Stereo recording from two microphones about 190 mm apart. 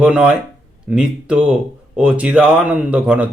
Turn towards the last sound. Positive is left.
turn(degrees=-5)  # may be behind; listen again after turning